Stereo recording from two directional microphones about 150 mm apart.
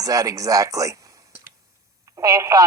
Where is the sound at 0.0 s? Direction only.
25° right (ahead or behind).